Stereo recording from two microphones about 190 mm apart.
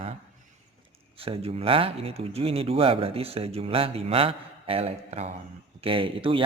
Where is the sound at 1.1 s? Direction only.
30° right (ahead or behind).